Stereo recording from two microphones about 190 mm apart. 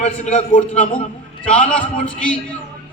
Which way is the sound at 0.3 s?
35° left (ahead or behind).